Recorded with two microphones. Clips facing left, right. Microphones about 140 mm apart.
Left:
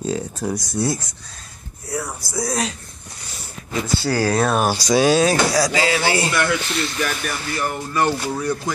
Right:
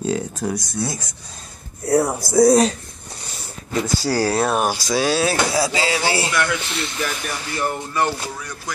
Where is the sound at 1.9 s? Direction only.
50° right (ahead or behind).